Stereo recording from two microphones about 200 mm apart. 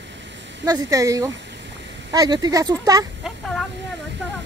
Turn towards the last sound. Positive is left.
turn(degrees=0)  # may be behind; listen again after turning